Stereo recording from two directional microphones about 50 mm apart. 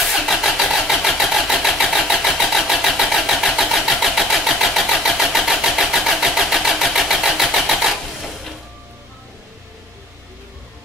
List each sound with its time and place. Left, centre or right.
0.0 s vehicle: centre